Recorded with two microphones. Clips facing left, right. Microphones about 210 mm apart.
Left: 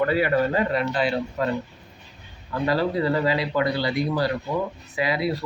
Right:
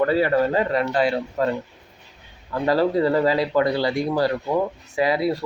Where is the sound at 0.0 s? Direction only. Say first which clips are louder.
Right 2 dB; 35° right (ahead or behind).